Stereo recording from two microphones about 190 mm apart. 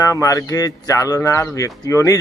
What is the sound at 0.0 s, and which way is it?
Speech, 20° left (ahead or behind).